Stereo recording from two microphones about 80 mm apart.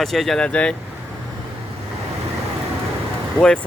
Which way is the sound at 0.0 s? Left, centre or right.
Centre.